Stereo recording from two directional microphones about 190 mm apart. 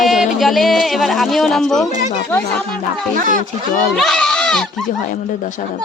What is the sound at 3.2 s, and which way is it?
Speech, 40° right (ahead or behind).